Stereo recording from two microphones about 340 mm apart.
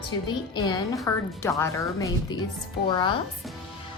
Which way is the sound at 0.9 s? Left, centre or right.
Centre.